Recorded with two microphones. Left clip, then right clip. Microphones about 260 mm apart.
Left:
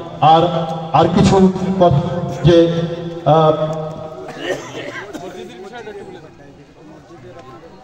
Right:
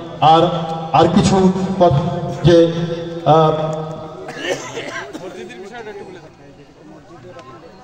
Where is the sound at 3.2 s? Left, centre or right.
Right.